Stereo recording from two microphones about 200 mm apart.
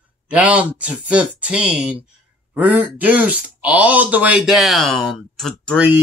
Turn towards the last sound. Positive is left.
turn(degrees=-5)  # may be behind; listen again after turning